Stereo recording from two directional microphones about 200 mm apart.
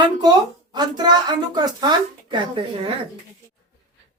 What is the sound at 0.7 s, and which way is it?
A woman's voice, 20° right (ahead or behind).